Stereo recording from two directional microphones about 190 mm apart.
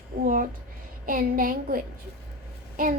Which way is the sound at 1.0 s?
45° right (ahead or behind).